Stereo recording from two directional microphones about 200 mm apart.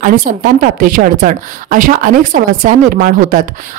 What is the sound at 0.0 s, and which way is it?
Speech, 40° right (ahead or behind).